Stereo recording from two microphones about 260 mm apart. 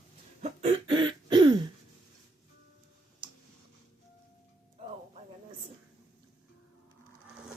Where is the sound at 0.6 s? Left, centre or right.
Centre.